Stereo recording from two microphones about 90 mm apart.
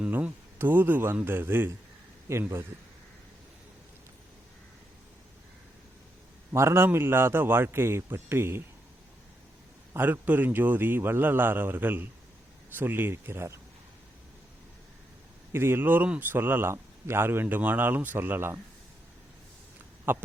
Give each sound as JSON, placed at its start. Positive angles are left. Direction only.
{"t": 0.0, "sound": "a man's voice", "side_deg": -15}
{"t": 6.5, "sound": "a man's voice", "side_deg": -30}
{"t": 9.9, "sound": "a man's voice", "side_deg": -20}
{"t": 15.5, "sound": "a man's voice", "side_deg": -25}
{"t": 20.1, "sound": "a man's voice", "side_deg": -20}